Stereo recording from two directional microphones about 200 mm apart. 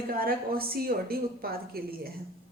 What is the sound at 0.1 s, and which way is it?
A woman's voice, 50° right (ahead or behind).